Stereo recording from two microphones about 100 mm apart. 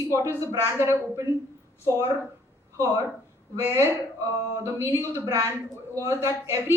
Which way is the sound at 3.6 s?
20° right (ahead or behind).